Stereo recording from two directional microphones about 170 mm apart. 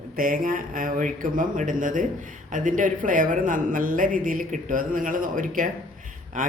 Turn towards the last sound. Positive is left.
turn(degrees=-50)  # may be behind; listen again after turning